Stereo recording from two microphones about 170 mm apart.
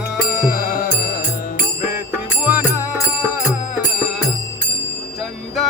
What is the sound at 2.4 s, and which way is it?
Music, 10° right (ahead or behind).